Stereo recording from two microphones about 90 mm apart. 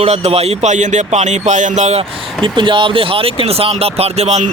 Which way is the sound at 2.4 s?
65° right (ahead or behind).